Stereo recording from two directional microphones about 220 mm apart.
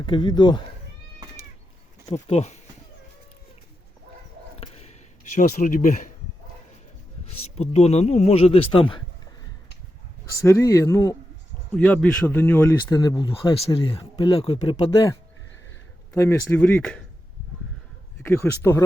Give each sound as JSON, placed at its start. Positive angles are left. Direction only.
{"t": 0.0, "sound": "speech", "side_deg": 20}
{"t": 2.0, "sound": "speech", "side_deg": 25}
{"t": 4.6, "sound": "a sound", "side_deg": 30}
{"t": 7.5, "sound": "speech", "side_deg": 30}
{"t": 10.4, "sound": "speech", "side_deg": 15}
{"t": 11.7, "sound": "speech", "side_deg": 0}
{"t": 18.2, "sound": "speech", "side_deg": 10}